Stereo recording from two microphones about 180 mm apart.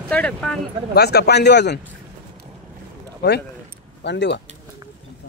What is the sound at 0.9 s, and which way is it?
Speech, 65° left (ahead or behind).